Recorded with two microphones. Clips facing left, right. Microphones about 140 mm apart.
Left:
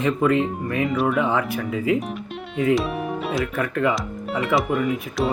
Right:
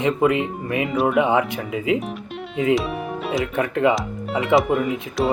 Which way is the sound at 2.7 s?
Centre (ahead or behind).